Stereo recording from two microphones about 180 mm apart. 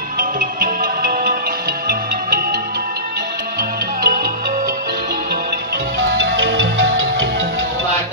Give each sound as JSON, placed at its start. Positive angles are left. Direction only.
{"t": 0.2, "sound": "music", "side_deg": -50}
{"t": 4.0, "sound": "music", "side_deg": -55}
{"t": 6.1, "sound": "music", "side_deg": -65}